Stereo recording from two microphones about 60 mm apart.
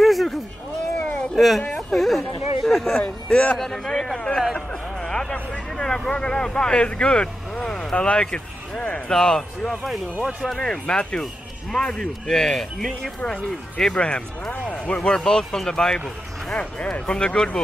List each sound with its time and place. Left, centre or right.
0.0 s a sound: centre
0.9 s a sound: left
1.3 s speech: centre
3.0 s speech: centre
3.5 s speech: centre
13.2 s speech: left